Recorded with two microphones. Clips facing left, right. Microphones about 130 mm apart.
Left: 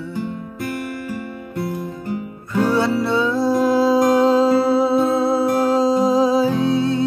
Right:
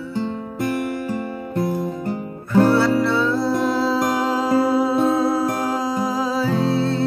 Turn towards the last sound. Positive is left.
turn(degrees=20)  # may be behind; listen again after turning